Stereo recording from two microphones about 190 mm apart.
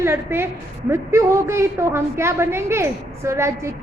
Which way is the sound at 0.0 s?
15° right (ahead or behind).